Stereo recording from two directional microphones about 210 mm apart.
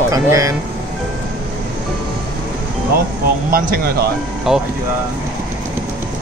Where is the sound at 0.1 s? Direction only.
15° right (ahead or behind).